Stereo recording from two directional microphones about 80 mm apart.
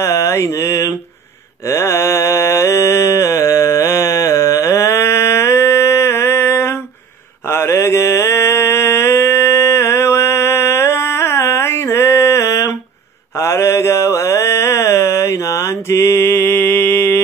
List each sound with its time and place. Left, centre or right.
0.0 s mantra: left